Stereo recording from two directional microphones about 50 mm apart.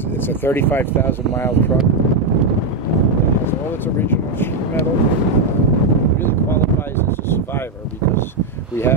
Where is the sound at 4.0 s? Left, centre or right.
Left.